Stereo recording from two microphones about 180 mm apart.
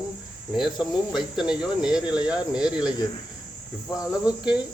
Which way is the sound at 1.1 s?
5° right (ahead or behind).